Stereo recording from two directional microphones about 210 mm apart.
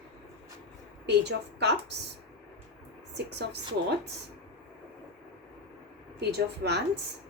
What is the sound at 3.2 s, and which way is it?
Speech, 55° right (ahead or behind).